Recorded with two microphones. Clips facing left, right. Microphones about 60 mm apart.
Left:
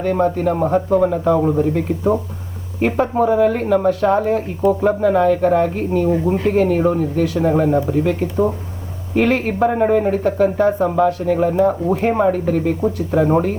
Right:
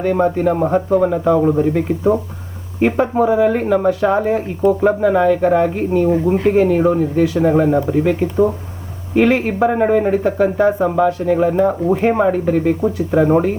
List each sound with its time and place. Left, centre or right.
0.0 s speech: centre
2.8 s speech: centre